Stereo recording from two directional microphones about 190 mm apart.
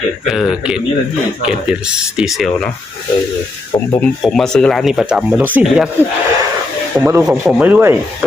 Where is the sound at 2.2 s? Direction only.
Centre (ahead or behind).